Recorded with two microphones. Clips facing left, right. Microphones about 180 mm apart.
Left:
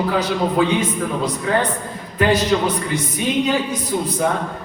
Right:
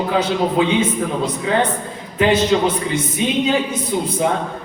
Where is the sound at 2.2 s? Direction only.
25° right (ahead or behind).